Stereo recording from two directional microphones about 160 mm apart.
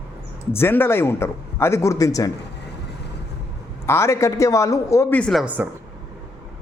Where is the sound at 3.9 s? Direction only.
15° left (ahead or behind).